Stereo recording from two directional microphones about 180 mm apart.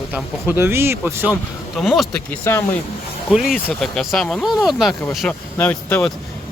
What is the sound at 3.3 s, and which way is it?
Speech, centre (ahead or behind).